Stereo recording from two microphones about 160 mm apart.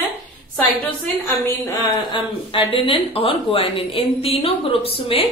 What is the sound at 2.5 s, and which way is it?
A woman's voice, 35° left (ahead or behind).